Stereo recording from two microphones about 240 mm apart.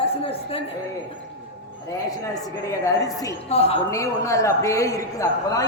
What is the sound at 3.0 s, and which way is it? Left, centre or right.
Speech, centre.